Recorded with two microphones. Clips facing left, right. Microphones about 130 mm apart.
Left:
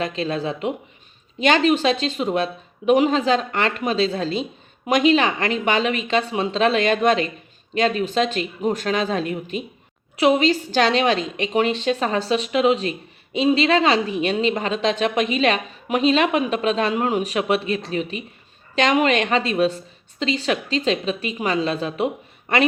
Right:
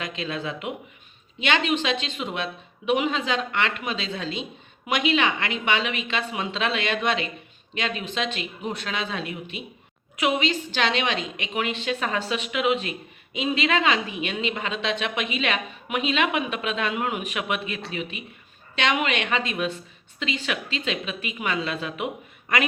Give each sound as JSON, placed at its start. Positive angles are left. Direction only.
{"t": 0.0, "sound": "a woman's voice", "side_deg": 35}